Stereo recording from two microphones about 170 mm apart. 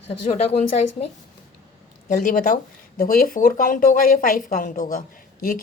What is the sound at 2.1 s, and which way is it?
Speech, 50° left (ahead or behind).